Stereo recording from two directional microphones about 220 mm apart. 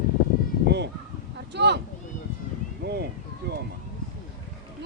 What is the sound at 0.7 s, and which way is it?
Crow, 50° right (ahead or behind).